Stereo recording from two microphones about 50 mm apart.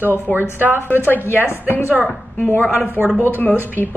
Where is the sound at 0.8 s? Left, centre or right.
Left.